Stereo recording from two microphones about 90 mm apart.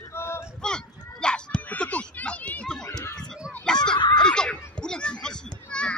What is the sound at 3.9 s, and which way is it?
Snicker, 60° left (ahead or behind).